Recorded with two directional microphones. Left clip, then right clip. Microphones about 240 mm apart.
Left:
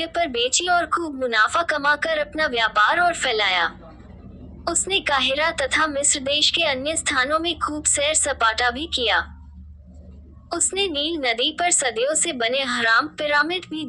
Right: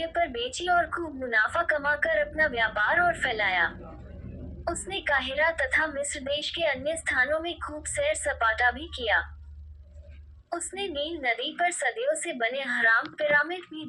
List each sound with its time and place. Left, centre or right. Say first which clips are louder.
0.0 s a woman's voice: left 6 dB; left
10.5 s a woman's voice: left 9 dB; left